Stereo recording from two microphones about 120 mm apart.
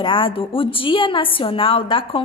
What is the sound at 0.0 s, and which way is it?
A woman's voice, 45° left (ahead or behind).